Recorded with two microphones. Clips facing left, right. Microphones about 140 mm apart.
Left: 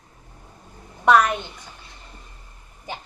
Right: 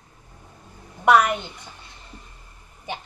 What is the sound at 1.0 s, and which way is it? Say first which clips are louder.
Speech: even; 10° right (ahead or behind).